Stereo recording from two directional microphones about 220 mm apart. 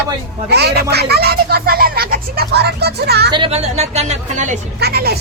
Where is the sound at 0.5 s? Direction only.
45° right (ahead or behind).